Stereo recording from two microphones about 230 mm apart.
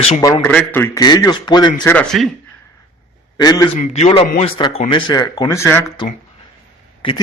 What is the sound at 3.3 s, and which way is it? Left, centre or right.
Speech, centre.